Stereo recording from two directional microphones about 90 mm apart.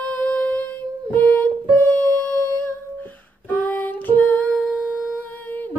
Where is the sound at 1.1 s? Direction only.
20° left (ahead or behind).